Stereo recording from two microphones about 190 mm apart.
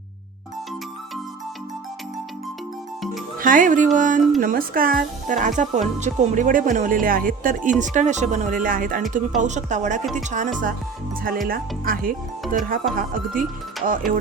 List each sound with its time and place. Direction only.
3.4 s a woman's voice: 45° right (ahead or behind)
13.8 s speech: 45° right (ahead or behind)